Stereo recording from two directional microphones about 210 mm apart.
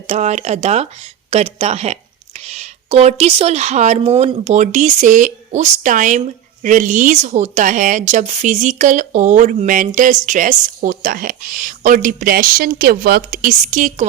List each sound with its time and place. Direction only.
0.1 s speech: 30° right (ahead or behind)